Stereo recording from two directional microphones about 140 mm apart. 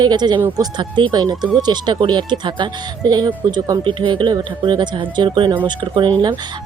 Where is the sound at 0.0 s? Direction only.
30° right (ahead or behind).